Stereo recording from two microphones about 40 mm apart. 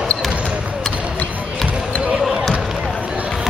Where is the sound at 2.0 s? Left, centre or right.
Right.